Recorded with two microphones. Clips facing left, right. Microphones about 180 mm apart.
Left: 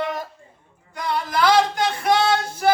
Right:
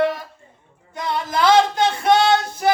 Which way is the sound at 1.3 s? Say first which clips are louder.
Right 3 dB; 25° right (ahead or behind).